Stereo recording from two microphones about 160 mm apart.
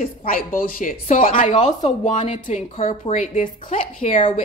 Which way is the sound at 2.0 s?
45° left (ahead or behind).